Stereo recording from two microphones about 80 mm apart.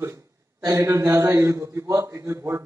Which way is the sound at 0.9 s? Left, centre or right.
Right.